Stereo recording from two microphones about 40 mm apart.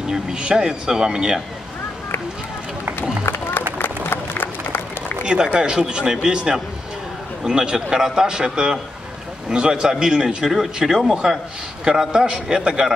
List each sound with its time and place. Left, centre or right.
0.0 s speech: centre
3.3 s a sound: left
5.2 s speech: right
10.8 s speech: centre
12.1 s speech: centre